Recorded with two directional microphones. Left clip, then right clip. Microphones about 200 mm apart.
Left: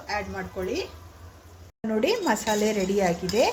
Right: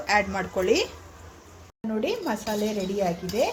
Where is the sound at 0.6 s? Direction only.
Centre (ahead or behind).